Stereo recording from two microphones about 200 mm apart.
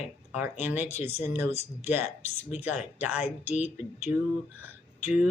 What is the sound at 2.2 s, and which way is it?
Speech, 35° left (ahead or behind).